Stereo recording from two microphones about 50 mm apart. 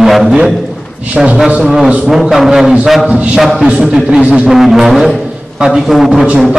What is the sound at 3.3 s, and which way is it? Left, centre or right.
Speech, centre.